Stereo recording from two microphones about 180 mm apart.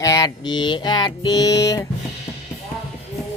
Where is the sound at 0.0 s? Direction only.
20° left (ahead or behind).